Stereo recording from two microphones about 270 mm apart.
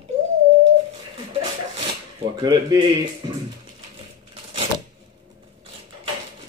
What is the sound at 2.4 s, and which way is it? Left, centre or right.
Speech, centre.